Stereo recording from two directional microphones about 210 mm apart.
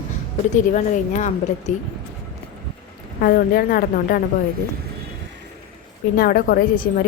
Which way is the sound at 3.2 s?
45° left (ahead or behind).